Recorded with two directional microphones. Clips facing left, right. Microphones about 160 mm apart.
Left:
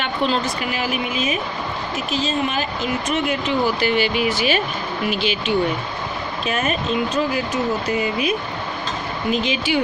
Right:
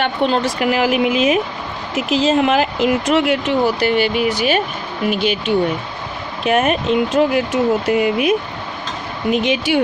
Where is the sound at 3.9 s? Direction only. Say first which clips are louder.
Right 3 dB; 50° right (ahead or behind).